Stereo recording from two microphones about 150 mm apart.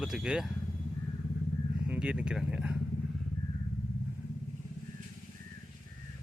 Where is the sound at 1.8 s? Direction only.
5° right (ahead or behind).